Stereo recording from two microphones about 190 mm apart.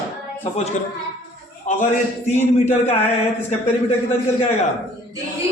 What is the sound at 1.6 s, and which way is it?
Speech, 40° left (ahead or behind).